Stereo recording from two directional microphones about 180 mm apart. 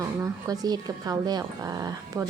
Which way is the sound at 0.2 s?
20° right (ahead or behind).